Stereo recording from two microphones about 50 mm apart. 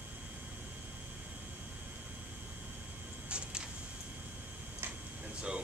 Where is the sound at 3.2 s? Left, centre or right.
Right.